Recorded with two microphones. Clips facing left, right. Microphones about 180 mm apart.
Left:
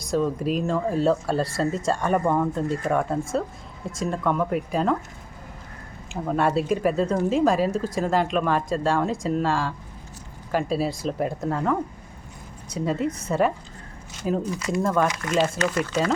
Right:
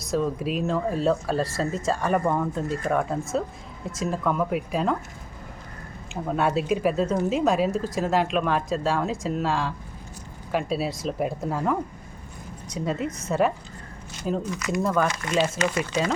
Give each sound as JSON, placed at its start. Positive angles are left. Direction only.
{"t": 0.0, "sound": "speech", "side_deg": 0}
{"t": 6.2, "sound": "speech", "side_deg": 0}
{"t": 14.5, "sound": "speech", "side_deg": 30}
{"t": 14.8, "sound": "speech", "side_deg": -5}